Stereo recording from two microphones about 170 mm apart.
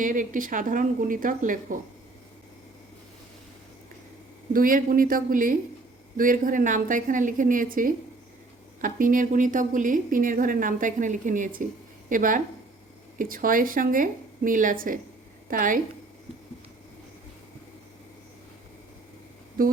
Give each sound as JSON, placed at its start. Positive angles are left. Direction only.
{"t": 0.0, "sound": "a woman's voice", "side_deg": -50}
{"t": 4.5, "sound": "a woman's voice", "side_deg": -55}
{"t": 19.6, "sound": "a woman's voice", "side_deg": -55}